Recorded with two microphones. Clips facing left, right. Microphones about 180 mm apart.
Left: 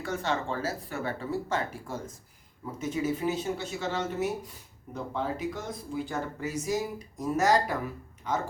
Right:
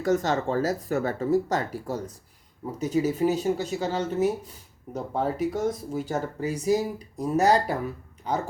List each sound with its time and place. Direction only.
0.0 s speech: 40° right (ahead or behind)